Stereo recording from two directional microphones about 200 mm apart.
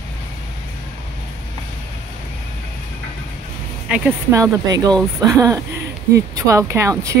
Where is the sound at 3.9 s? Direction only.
15° right (ahead or behind).